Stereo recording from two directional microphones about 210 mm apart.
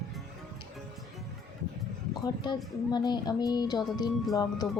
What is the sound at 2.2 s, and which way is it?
Speech, 20° left (ahead or behind).